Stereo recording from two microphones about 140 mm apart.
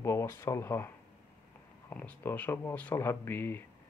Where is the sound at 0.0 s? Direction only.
20° left (ahead or behind).